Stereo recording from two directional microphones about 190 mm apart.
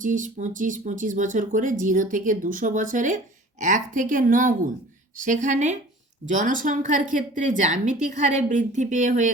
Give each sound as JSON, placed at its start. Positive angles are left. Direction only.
{"t": 0.0, "sound": "a woman's voice", "side_deg": -40}